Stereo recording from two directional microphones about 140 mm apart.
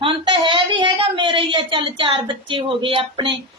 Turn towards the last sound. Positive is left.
turn(degrees=-35)  # may be behind; listen again after turning